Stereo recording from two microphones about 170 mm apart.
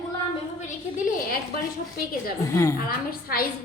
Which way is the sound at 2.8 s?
60° left (ahead or behind).